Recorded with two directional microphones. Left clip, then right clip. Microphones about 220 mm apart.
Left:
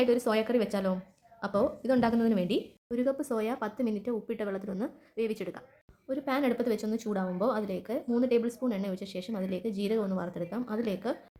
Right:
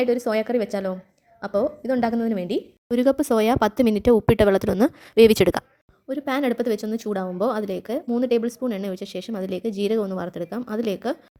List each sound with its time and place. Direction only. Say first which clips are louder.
0.0 s a woman's voice: right 5 dB; 20° right (ahead or behind)
2.9 s speech: right 11 dB; 45° right (ahead or behind)
6.1 s a woman's voice: right 6 dB; 35° right (ahead or behind)